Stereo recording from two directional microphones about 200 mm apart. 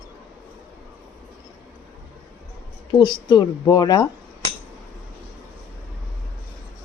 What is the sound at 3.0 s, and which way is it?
Speech, 20° left (ahead or behind).